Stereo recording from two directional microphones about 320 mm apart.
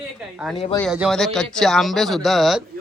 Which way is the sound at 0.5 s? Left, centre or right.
Centre.